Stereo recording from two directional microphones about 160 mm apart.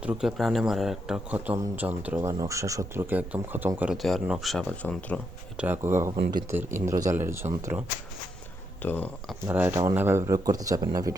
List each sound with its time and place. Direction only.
0.0 s a man's voice: 5° right (ahead or behind)
5.5 s speech: 10° right (ahead or behind)
8.8 s speech: 10° left (ahead or behind)
9.5 s speech: 15° right (ahead or behind)